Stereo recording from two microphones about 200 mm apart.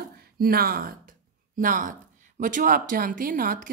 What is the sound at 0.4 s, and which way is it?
Speech, 50° right (ahead or behind).